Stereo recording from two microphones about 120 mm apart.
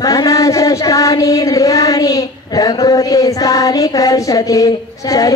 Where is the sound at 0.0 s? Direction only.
30° left (ahead or behind).